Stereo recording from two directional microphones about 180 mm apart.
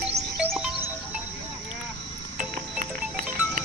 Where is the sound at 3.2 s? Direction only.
5° right (ahead or behind).